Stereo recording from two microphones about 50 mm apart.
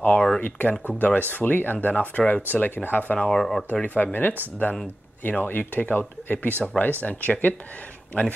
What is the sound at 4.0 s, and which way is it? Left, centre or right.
Speech, left.